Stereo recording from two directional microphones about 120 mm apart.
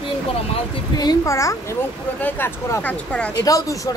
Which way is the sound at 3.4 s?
30° left (ahead or behind).